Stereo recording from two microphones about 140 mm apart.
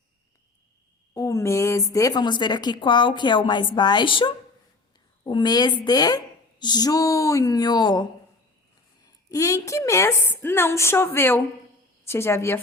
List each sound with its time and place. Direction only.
1.1 s a woman's voice: 20° left (ahead or behind)
9.3 s a woman's voice: 20° left (ahead or behind)